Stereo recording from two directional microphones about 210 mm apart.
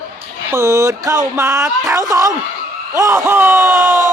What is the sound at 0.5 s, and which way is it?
Speech, 15° right (ahead or behind).